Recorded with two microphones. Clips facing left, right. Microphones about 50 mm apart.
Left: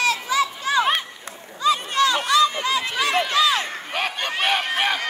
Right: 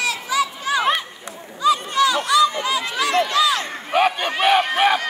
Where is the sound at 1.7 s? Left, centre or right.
Left.